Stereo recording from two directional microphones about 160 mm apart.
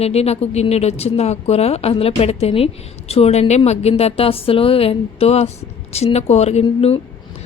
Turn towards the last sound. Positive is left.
turn(degrees=40)  # may be behind; listen again after turning